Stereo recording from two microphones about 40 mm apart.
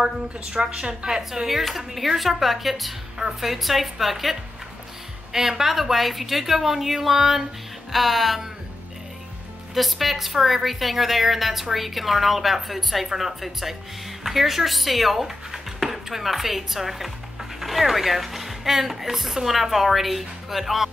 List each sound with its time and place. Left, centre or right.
0.0 s a woman's voice: right
1.6 s a woman's voice: centre
9.8 s speech: centre